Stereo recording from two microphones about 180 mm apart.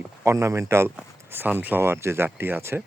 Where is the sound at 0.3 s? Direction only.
15° right (ahead or behind).